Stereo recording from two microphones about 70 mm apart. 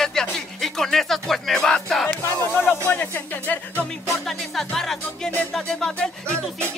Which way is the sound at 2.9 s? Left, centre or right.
Left.